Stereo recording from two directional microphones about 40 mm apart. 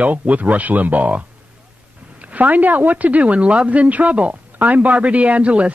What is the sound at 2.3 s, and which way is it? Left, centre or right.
A woman's voice, right.